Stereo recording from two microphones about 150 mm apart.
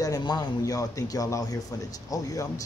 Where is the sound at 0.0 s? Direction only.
25° left (ahead or behind).